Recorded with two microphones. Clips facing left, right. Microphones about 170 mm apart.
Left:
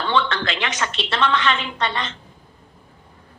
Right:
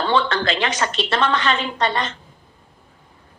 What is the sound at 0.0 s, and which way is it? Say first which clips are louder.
A woman's voice: right 2 dB; 40° right (ahead or behind).